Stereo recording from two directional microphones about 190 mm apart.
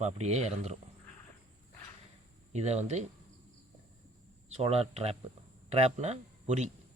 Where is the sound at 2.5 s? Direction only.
35° right (ahead or behind).